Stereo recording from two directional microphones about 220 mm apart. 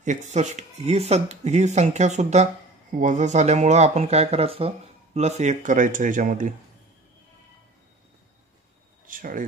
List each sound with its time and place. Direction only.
0.0 s speech: 35° right (ahead or behind)
9.0 s speech: 40° right (ahead or behind)